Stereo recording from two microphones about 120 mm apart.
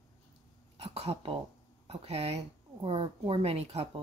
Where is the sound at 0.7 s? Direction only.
60° right (ahead or behind).